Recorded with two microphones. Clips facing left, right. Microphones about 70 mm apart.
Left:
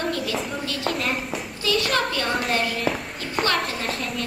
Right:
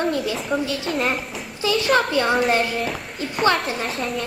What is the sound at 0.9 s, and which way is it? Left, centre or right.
Speech, centre.